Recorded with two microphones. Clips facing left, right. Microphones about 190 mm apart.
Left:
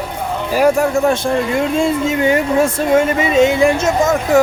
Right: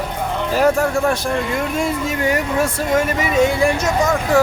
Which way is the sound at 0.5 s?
15° left (ahead or behind).